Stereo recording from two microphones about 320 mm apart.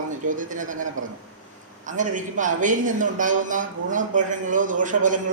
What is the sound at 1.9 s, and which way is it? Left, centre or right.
A man's voice, right.